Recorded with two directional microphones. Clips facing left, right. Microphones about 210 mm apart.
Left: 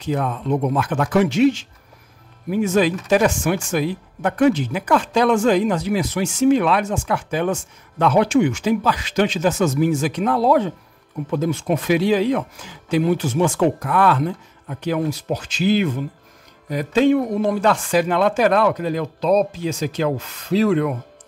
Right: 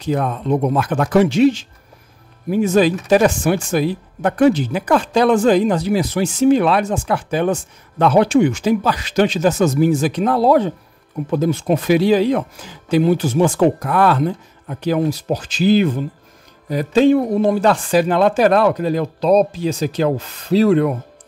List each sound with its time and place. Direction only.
0.0 s speech: 40° right (ahead or behind)